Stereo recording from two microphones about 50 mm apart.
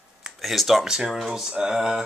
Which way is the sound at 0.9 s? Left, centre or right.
Centre.